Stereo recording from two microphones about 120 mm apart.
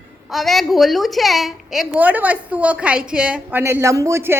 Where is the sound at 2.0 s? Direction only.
15° right (ahead or behind).